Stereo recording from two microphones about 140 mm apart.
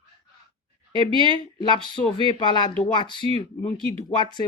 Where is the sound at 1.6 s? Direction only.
35° left (ahead or behind).